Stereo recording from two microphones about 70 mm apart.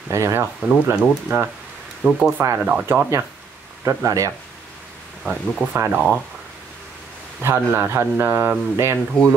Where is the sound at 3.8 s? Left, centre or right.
Right.